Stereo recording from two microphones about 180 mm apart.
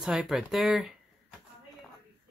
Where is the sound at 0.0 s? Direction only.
5° right (ahead or behind).